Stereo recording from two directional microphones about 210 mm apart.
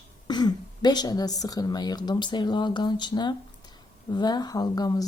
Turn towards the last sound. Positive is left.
turn(degrees=20)  # may be behind; listen again after turning